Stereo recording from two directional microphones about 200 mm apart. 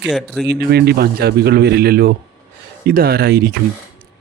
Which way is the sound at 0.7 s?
55° right (ahead or behind).